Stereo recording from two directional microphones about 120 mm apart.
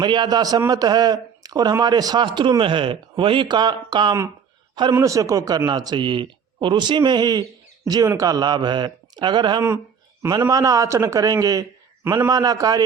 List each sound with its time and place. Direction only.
0.0 s a man's voice: 40° right (ahead or behind)
4.9 s speech: 25° right (ahead or behind)
10.4 s a man's voice: 30° right (ahead or behind)